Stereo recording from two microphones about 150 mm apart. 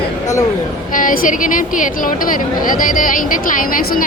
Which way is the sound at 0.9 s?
65° left (ahead or behind).